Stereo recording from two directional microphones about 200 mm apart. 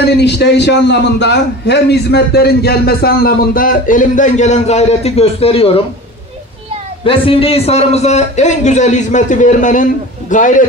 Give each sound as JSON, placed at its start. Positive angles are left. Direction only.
{"t": 0.0, "sound": "a man's voice", "side_deg": 55}
{"t": 7.1, "sound": "a man's voice", "side_deg": 30}